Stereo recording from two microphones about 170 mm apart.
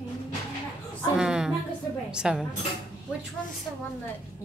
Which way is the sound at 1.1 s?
5° right (ahead or behind).